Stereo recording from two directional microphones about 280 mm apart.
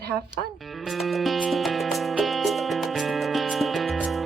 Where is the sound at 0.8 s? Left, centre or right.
Centre.